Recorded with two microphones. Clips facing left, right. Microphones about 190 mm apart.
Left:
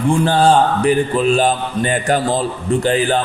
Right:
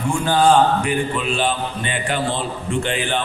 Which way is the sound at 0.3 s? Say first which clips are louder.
Right 1 dB; 30° left (ahead or behind).